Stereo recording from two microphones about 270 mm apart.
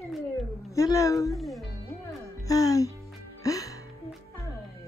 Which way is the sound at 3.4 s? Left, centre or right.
Centre.